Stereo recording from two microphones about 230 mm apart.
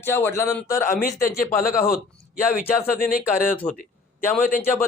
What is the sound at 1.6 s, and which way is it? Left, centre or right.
Speech, left.